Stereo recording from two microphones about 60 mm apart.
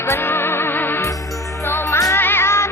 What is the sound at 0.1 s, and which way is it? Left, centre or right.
Music, left.